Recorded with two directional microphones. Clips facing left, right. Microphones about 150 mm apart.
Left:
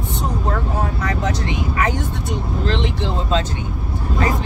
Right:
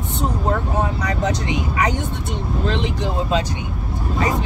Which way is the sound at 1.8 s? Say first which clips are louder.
Even; 20° right (ahead or behind).